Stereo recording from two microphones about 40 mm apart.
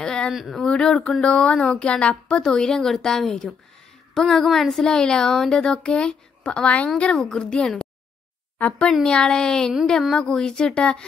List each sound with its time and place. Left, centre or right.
0.0 s a sound: centre
0.6 s speech: centre
1.2 s speech: left; by 4.8 s centre
4.8 s speech: centre; by 6.9 s left
7.0 s speech: left
9.0 s speech: centre